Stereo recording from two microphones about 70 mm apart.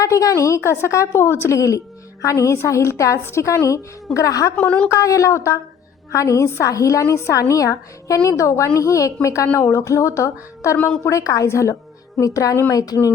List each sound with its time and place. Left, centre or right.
0.0 s a woman's voice: left
4.5 s a woman's voice: centre
4.9 s a woman's voice: left